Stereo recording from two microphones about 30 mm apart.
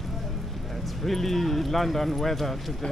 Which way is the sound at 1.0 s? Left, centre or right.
Centre.